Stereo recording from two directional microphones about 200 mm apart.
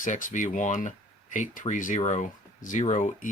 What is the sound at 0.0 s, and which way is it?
Speech, 40° left (ahead or behind).